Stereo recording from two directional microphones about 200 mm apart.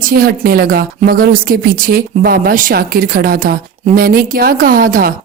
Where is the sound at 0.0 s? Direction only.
45° right (ahead or behind).